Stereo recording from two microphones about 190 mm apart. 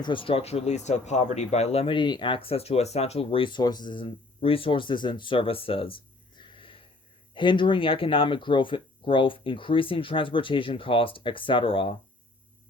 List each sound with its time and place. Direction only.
0.0 s speech: 25° left (ahead or behind)